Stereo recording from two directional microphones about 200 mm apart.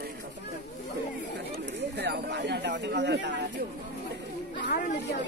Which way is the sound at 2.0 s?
55° right (ahead or behind).